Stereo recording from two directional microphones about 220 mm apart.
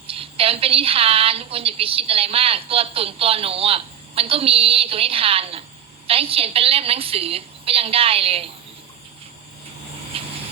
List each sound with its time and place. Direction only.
0.1 s a woman's voice: 25° right (ahead or behind)
10.1 s vehicle: 25° right (ahead or behind)